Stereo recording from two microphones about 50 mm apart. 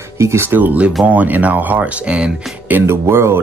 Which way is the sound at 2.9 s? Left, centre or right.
Right.